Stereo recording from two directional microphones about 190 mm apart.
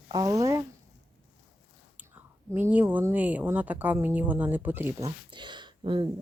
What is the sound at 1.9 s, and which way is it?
Speech, 10° right (ahead or behind).